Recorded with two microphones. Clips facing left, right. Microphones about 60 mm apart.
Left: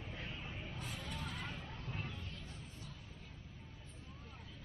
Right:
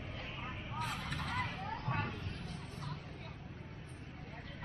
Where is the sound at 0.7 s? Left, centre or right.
Right.